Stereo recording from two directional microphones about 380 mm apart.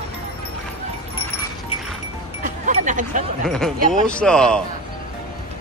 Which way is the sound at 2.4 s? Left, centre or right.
Centre.